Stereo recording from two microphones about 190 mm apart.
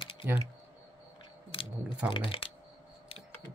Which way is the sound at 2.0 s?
25° left (ahead or behind).